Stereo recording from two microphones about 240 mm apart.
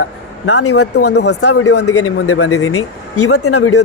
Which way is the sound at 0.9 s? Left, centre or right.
Left.